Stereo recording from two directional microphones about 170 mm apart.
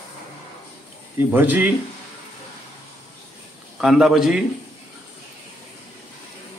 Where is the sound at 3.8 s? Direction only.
5° right (ahead or behind).